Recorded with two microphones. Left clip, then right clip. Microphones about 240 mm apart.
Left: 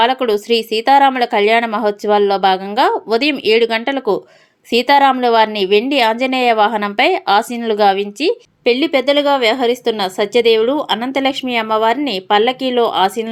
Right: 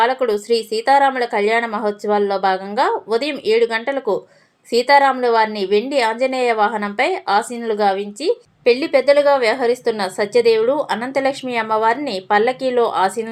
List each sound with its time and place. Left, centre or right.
0.0 s a woman's voice: left